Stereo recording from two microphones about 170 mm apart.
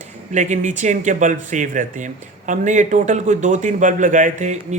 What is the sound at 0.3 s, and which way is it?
Speech, 45° right (ahead or behind).